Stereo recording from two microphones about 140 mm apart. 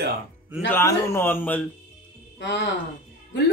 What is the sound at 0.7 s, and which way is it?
Speech, 20° left (ahead or behind).